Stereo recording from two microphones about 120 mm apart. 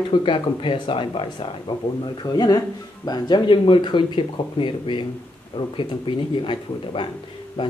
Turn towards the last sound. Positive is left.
turn(degrees=45)  # may be behind; listen again after turning